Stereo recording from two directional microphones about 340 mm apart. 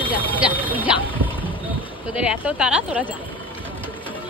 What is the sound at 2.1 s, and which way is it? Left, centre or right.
Speech, centre.